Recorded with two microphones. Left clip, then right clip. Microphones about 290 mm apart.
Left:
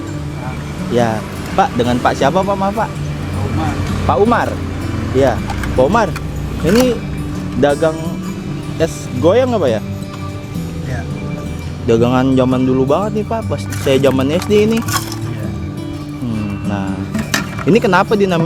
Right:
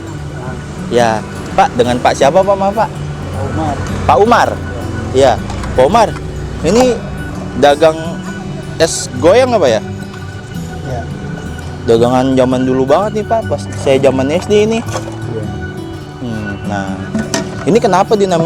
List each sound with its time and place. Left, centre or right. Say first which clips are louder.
0.9 s speech: right 5 dB; right; by 2.9 s centre
4.1 s speech: right 5 dB; right
11.9 s speech: right 3 dB; centre
13.5 s speech: right 3 dB; centre
17.7 s speech: right 2 dB; centre